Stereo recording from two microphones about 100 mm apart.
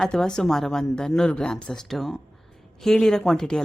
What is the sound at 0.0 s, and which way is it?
Speech, 5° left (ahead or behind).